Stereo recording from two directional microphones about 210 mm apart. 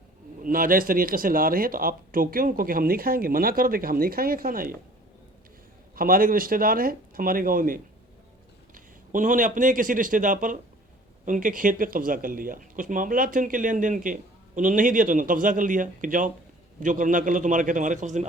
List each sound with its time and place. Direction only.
0.4 s speech: 40° right (ahead or behind)
6.0 s speech: 45° right (ahead or behind)